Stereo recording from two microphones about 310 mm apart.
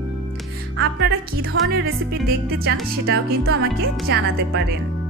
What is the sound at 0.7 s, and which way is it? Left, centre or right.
A woman's voice, right.